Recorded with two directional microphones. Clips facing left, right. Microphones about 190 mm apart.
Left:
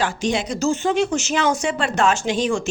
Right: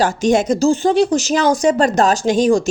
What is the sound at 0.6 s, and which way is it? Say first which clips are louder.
Speech: right 6 dB; 35° right (ahead or behind).